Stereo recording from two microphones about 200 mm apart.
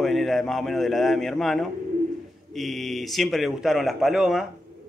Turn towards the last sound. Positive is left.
turn(degrees=0)  # may be behind; listen again after turning